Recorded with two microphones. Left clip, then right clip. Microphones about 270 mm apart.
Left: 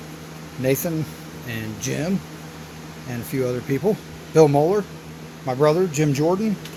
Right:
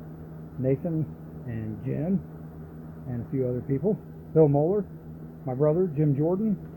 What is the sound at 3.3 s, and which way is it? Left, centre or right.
Speech, centre.